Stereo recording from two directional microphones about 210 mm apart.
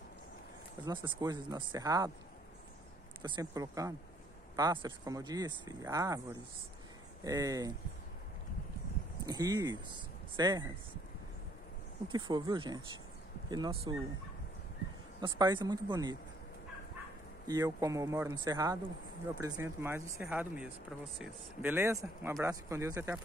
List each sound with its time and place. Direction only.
0.8 s speech: 20° right (ahead or behind)
3.2 s speech: 20° right (ahead or behind)
7.2 s speech: 15° right (ahead or behind)
9.2 s speech: 20° right (ahead or behind)
12.1 s speech: 20° right (ahead or behind)
15.1 s speech: 20° right (ahead or behind)
17.5 s speech: 15° right (ahead or behind)